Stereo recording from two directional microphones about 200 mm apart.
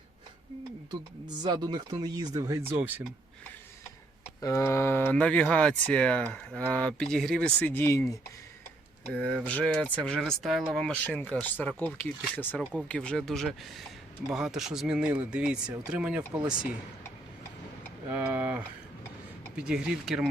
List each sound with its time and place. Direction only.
1.4 s speech: 20° right (ahead or behind)
4.4 s speech: 15° left (ahead or behind)
9.2 s speech: 5° left (ahead or behind)
18.1 s speech: 10° right (ahead or behind)